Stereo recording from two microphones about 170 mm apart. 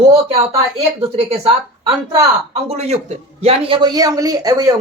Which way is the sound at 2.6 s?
40° right (ahead or behind).